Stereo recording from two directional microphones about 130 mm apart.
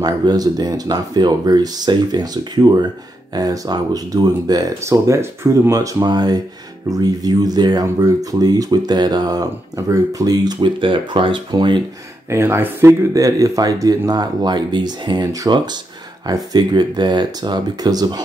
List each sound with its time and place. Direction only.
0.0 s speech: 35° right (ahead or behind)
12.3 s speech: 20° right (ahead or behind)